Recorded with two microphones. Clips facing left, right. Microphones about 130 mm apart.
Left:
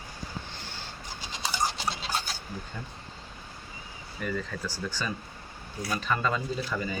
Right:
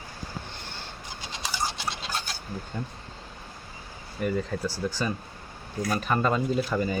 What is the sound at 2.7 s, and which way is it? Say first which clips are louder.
Speech: right 6 dB; 25° right (ahead or behind).